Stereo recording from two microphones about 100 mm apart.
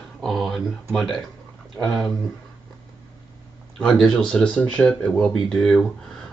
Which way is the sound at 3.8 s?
5° left (ahead or behind).